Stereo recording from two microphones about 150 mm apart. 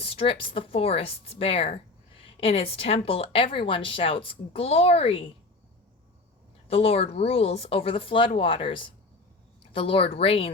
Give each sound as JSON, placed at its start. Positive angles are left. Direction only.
{"t": 0.0, "sound": "speech", "side_deg": 40}
{"t": 6.7, "sound": "speech", "side_deg": 40}